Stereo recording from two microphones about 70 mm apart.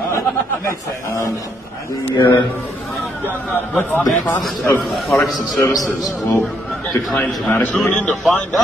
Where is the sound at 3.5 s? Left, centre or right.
Left.